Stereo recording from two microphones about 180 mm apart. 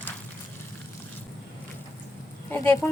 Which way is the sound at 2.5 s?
15° left (ahead or behind).